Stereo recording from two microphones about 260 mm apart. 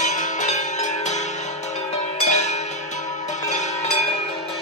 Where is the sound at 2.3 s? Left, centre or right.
Left.